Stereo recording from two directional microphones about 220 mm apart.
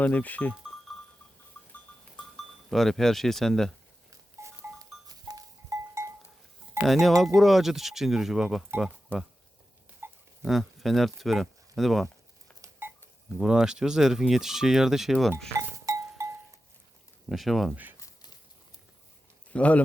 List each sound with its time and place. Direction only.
0.0 s speech: 5° left (ahead or behind)
2.3 s speech: centre (ahead or behind)
4.1 s goat: 15° right (ahead or behind)
6.8 s speech: centre (ahead or behind)
10.0 s a sound: 10° right (ahead or behind)
10.4 s speech: centre (ahead or behind)
12.6 s a sound: 15° right (ahead or behind)
13.4 s speech: 5° right (ahead or behind)
15.5 s music: 15° right (ahead or behind)
17.2 s speech: centre (ahead or behind)
18.0 s horse: 20° left (ahead or behind)
19.5 s speech: 5° left (ahead or behind)